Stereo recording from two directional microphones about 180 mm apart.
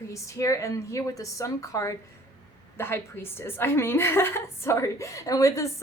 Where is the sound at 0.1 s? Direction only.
15° left (ahead or behind).